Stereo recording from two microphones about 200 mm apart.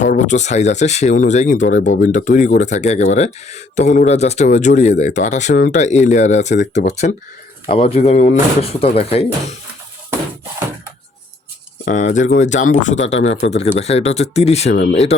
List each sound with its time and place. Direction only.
0.0 s speech: 35° left (ahead or behind)
11.9 s speech: 40° left (ahead or behind)